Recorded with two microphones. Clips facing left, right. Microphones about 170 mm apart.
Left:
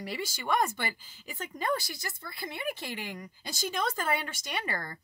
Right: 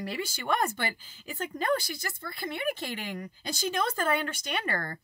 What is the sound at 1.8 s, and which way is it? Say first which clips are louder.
A woman's voice: right 3 dB; 55° right (ahead or behind).